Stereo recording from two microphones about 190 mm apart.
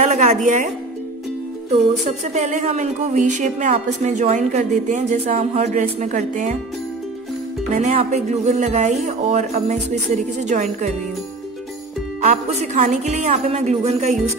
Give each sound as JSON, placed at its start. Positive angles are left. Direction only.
{"t": 0.0, "sound": "a woman's voice", "side_deg": -40}
{"t": 1.7, "sound": "speech", "side_deg": -35}
{"t": 7.7, "sound": "speech", "side_deg": -35}
{"t": 12.2, "sound": "speech", "side_deg": -35}